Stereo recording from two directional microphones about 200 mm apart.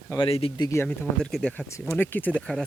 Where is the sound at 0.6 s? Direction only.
10° left (ahead or behind).